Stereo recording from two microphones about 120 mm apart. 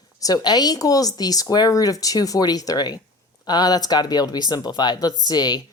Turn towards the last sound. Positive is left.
turn(degrees=35)  # may be behind; listen again after turning